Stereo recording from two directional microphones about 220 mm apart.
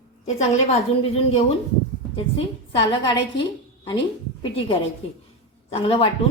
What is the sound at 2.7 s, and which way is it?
Speech, 20° left (ahead or behind).